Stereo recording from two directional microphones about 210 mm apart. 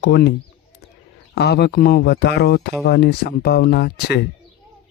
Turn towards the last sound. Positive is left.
turn(degrees=50)  # may be behind; listen again after turning